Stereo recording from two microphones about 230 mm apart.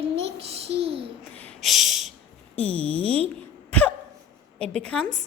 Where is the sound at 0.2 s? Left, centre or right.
Right.